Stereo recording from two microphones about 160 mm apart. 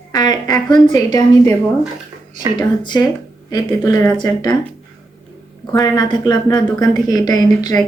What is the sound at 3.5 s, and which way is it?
Speech, 15° left (ahead or behind).